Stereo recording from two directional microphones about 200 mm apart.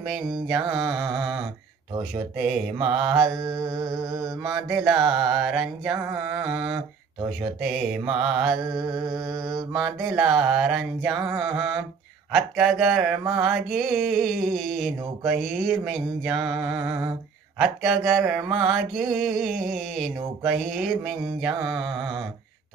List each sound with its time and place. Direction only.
0.5 s mantra: centre (ahead or behind)
3.4 s mantra: 20° right (ahead or behind)
4.4 s mantra: centre (ahead or behind)
8.6 s mantra: 20° right (ahead or behind)
10.0 s mantra: centre (ahead or behind)